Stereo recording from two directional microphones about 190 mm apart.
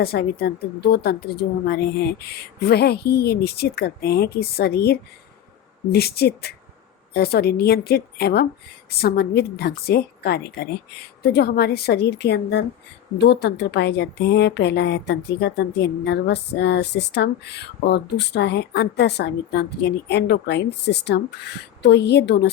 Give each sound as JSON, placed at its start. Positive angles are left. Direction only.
{"t": 0.0, "sound": "a woman's voice", "side_deg": 55}